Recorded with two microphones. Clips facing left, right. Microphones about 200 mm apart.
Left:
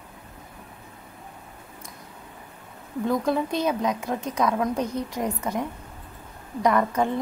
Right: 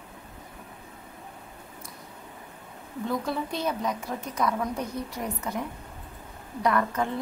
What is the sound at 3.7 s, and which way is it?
Speech, 90° left.